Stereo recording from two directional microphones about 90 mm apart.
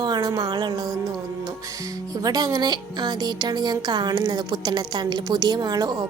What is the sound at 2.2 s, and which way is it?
Speech, 45° right (ahead or behind).